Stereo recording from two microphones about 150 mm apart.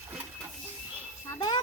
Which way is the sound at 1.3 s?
30° left (ahead or behind).